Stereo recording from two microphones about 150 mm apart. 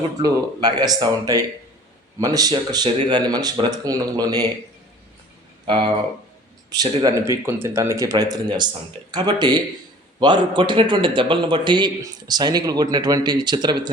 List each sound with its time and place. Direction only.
0.2 s a man's voice: 25° right (ahead or behind)
5.6 s speech: 35° right (ahead or behind)
6.7 s a man's voice: 20° right (ahead or behind)